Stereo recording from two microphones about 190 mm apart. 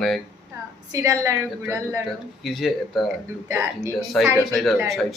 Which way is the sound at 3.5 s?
15° right (ahead or behind).